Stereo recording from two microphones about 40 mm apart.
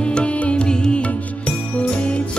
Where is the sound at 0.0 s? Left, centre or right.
Left.